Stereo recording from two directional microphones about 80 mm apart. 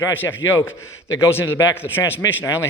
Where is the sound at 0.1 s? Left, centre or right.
Left.